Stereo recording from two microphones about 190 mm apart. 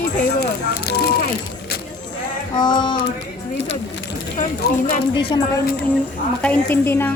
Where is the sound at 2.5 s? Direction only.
25° left (ahead or behind).